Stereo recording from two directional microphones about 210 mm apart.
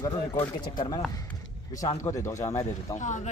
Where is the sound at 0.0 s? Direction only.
20° left (ahead or behind).